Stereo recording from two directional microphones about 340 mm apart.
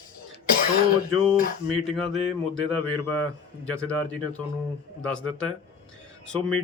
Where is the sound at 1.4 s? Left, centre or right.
Left.